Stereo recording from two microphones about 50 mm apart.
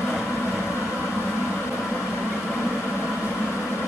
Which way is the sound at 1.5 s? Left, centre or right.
Left.